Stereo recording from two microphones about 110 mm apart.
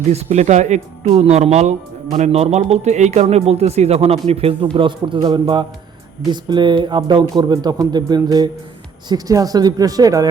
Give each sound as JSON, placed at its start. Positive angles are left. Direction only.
{"t": 0.1, "sound": "speech", "side_deg": -75}